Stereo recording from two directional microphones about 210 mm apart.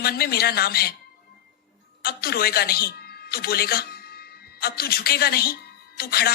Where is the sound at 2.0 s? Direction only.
45° left (ahead or behind).